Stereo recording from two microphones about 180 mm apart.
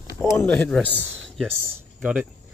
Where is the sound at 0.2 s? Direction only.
15° left (ahead or behind).